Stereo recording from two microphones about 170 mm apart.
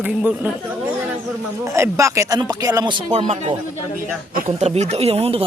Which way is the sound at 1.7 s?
15° right (ahead or behind).